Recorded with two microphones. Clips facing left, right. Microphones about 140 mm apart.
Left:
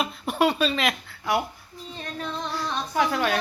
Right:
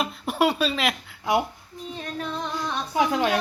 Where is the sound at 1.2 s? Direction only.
20° right (ahead or behind).